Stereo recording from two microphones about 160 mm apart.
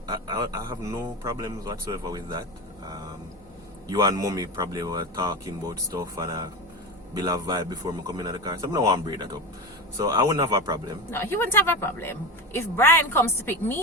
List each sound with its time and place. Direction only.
0.1 s speech: 25° right (ahead or behind)
3.8 s speech: 25° right (ahead or behind)
11.1 s a woman's voice: 15° left (ahead or behind)